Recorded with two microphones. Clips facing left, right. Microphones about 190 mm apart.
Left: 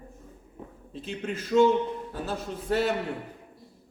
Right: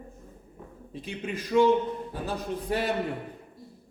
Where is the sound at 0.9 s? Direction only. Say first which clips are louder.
Left 1 dB; 15° right (ahead or behind).